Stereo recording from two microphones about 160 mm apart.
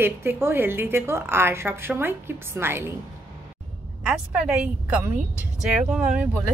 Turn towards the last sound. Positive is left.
turn(degrees=-10)  # may be behind; listen again after turning